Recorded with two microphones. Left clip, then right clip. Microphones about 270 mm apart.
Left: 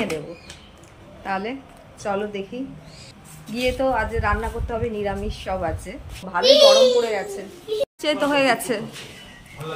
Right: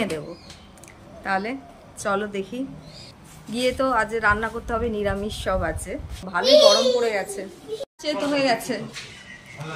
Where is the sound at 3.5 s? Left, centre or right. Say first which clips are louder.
Even; centre.